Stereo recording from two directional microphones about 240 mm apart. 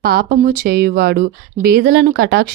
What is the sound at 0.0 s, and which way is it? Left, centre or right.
Speech, right.